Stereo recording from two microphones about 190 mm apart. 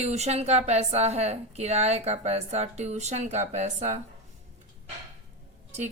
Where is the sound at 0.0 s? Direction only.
35° right (ahead or behind).